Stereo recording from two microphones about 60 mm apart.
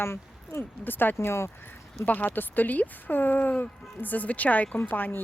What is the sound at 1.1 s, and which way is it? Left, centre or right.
Speech, left.